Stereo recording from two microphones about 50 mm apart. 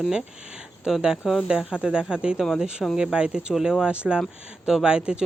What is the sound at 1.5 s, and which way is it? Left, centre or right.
Speech, centre.